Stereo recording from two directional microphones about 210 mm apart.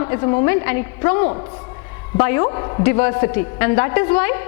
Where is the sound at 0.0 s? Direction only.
15° left (ahead or behind).